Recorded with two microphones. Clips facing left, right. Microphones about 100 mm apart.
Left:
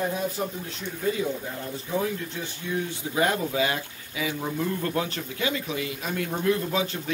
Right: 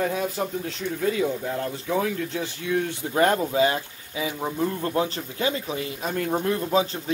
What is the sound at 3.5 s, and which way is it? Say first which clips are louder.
Speech: right 4 dB; 30° right (ahead or behind).